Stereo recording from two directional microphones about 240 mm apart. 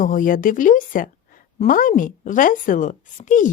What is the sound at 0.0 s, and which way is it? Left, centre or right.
A woman's voice, left.